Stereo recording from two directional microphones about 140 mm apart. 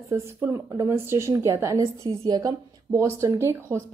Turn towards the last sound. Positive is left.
turn(degrees=-20)  # may be behind; listen again after turning